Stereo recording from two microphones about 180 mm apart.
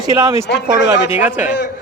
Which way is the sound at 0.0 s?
15° right (ahead or behind).